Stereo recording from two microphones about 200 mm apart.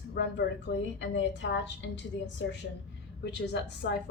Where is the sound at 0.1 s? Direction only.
60° left (ahead or behind).